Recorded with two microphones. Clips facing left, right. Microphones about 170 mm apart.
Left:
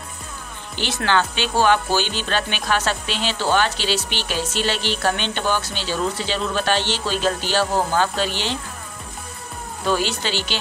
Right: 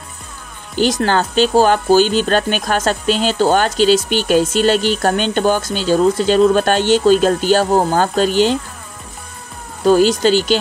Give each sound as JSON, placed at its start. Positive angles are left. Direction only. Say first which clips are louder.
{"t": 0.7, "sound": "speech", "louder": "right 6 dB", "side_deg": -40}
{"t": 9.8, "sound": "speech", "louder": "right 11 dB", "side_deg": -45}